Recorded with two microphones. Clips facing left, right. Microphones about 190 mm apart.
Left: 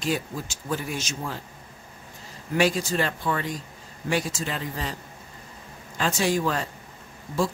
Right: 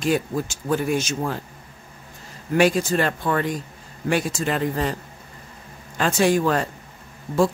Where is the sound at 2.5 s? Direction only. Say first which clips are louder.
Right 5 dB; 55° right (ahead or behind).